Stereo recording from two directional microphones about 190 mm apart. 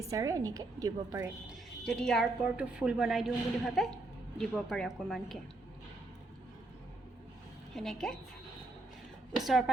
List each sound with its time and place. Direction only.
0.0 s a woman's voice: 15° right (ahead or behind)
1.5 s a woman's voice: centre (ahead or behind)
7.8 s a woman's voice: centre (ahead or behind)
9.4 s a woman's voice: centre (ahead or behind)